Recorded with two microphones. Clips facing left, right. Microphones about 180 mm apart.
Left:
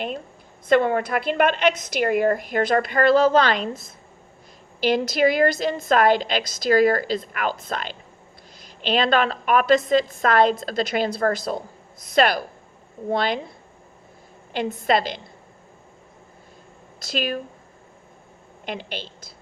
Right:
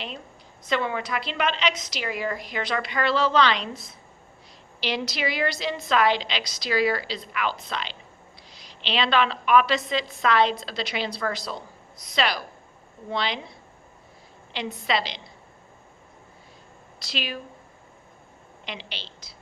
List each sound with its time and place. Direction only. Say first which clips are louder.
0.7 s a woman's voice: left 8 dB; 50° left (ahead or behind)
14.5 s a woman's voice: left 6 dB; 50° left (ahead or behind)
17.0 s a woman's voice: left 7 dB; 50° left (ahead or behind)
18.6 s a woman's voice: left 7 dB; 50° left (ahead or behind)